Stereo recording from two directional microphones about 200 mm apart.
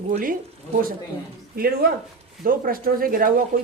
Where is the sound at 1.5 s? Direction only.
50° right (ahead or behind).